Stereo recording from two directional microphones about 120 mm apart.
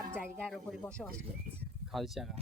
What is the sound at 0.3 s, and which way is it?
Speech, centre (ahead or behind).